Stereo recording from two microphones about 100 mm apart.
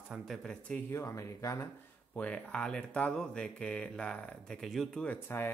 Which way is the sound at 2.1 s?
15° left (ahead or behind).